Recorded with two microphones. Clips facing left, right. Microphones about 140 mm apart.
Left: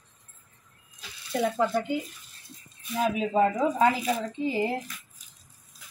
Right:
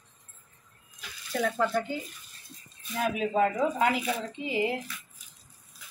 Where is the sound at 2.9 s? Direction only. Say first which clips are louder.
Left 2 dB; 25° left (ahead or behind).